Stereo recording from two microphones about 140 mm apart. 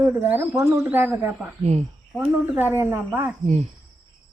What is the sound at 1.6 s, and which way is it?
Speech, 50° right (ahead or behind).